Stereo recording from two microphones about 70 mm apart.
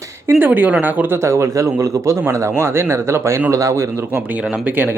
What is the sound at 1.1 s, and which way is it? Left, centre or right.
A man's voice, right.